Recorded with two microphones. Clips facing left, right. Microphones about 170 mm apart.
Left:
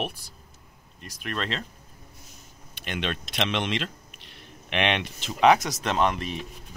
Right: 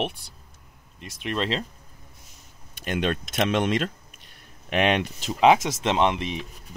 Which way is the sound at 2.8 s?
40° right (ahead or behind).